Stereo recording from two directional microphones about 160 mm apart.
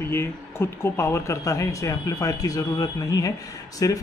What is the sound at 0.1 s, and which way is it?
Speech, 15° left (ahead or behind).